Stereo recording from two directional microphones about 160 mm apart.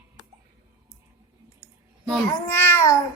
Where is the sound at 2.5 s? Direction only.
15° left (ahead or behind).